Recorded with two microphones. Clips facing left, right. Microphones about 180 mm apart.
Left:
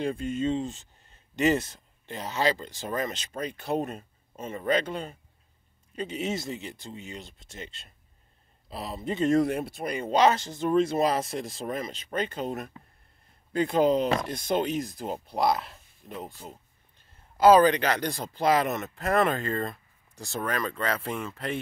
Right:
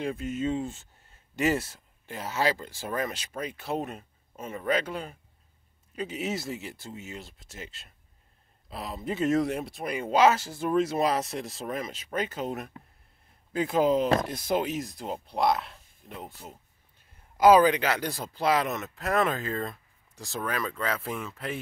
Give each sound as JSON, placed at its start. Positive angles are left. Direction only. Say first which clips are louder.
{"t": 0.2, "sound": "speech", "louder": "left 2 dB", "side_deg": -5}
{"t": 4.4, "sound": "speech", "louder": "left 1 dB", "side_deg": 30}
{"t": 4.6, "sound": "speech", "louder": "left 2 dB", "side_deg": -5}